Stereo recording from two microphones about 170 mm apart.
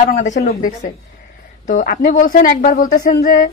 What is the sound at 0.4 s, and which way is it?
A woman's voice, 55° left (ahead or behind).